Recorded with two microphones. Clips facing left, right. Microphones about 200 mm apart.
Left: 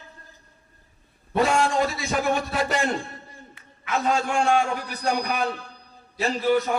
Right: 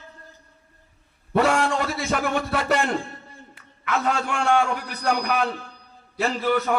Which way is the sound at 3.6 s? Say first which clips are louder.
Right 1 dB; 65° right (ahead or behind).